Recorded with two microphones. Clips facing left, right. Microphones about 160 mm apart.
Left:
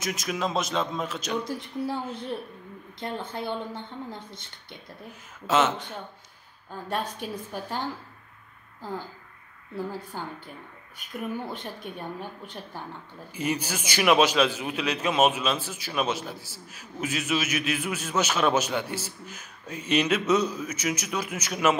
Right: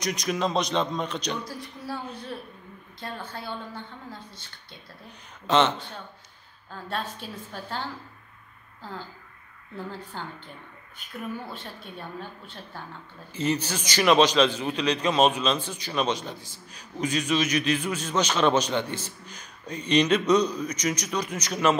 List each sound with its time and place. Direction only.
0.0 s a man's voice: 5° left (ahead or behind)
1.4 s a woman's voice: 20° left (ahead or behind)
5.5 s a man's voice: 5° left (ahead or behind)
6.9 s a man's voice: 15° left (ahead or behind)
9.8 s a man's voice: 10° left (ahead or behind)
11.5 s a man's voice: 15° left (ahead or behind)